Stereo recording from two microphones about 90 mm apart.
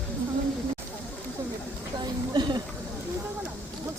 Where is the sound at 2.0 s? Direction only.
55° right (ahead or behind).